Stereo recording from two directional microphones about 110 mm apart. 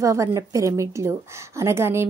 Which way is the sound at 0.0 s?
30° right (ahead or behind).